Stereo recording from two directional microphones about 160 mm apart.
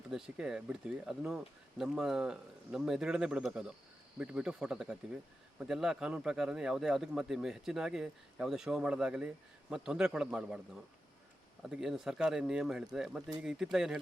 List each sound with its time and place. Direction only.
0.1 s speech: 5° right (ahead or behind)
11.6 s speech: 5° right (ahead or behind)